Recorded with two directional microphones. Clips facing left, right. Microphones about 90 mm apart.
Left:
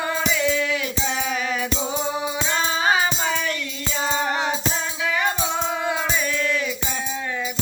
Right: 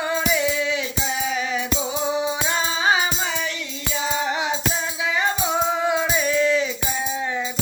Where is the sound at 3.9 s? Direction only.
50° left (ahead or behind).